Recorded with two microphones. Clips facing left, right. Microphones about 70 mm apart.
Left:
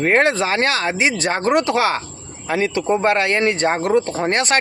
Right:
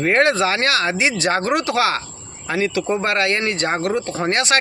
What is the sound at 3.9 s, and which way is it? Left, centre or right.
Speech, left.